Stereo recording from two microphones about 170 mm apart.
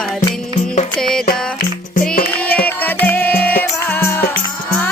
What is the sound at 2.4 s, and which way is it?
Music, 10° left (ahead or behind).